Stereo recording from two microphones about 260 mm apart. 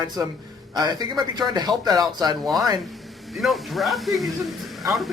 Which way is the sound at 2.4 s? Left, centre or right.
Centre.